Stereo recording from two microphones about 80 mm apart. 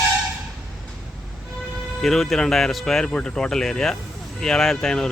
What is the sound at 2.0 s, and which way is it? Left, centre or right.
Speech, centre.